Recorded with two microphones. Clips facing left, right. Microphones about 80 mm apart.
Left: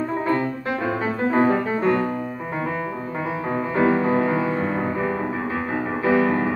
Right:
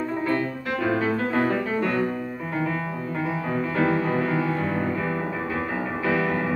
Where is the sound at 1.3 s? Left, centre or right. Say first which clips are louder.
Left 4 dB; left.